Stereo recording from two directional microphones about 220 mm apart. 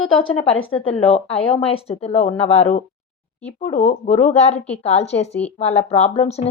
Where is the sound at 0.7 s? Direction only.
25° left (ahead or behind).